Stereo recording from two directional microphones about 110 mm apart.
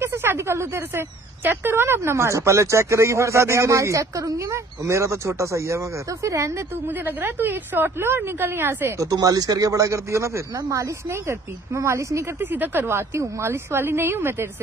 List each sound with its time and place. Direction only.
0.0 s speech: 20° right (ahead or behind)